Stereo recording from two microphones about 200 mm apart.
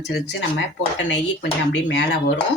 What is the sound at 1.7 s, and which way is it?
Speech, 65° left (ahead or behind).